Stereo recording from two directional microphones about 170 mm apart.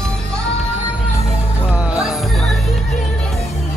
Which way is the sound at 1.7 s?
5° right (ahead or behind).